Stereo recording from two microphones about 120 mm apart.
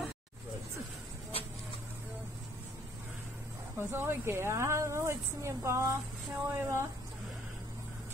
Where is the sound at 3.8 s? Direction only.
20° right (ahead or behind).